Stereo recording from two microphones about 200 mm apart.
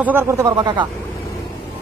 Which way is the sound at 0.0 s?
10° right (ahead or behind).